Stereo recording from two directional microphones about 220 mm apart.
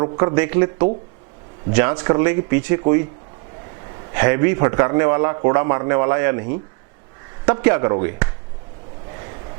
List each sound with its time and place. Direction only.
0.0 s a man's voice: 20° right (ahead or behind)
4.1 s a man's voice: 15° right (ahead or behind)